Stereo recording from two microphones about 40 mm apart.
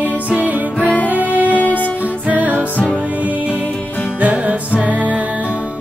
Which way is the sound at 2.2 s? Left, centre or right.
Right.